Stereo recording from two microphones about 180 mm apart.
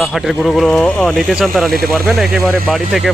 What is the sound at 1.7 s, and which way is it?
Speech, 55° right (ahead or behind).